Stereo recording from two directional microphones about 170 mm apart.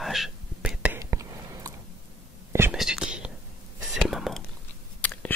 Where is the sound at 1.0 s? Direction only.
20° right (ahead or behind).